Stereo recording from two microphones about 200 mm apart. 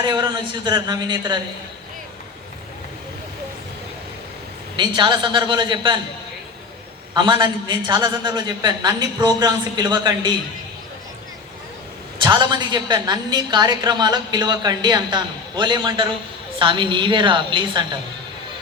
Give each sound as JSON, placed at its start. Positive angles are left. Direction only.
{"t": 0.0, "sound": "a woman's voice", "side_deg": -20}
{"t": 4.8, "sound": "a woman's voice", "side_deg": -25}
{"t": 7.1, "sound": "a woman's voice", "side_deg": -20}
{"t": 12.2, "sound": "a woman's voice", "side_deg": -20}